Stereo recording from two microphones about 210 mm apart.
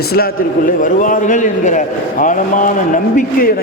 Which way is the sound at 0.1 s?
45° left (ahead or behind).